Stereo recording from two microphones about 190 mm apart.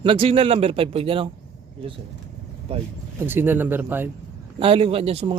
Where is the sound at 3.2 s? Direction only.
10° right (ahead or behind).